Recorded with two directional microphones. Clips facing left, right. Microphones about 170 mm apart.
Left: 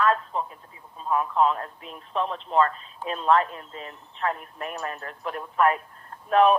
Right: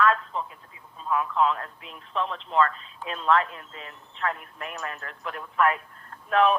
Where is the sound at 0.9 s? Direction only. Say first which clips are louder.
Left 2 dB; 40° left (ahead or behind).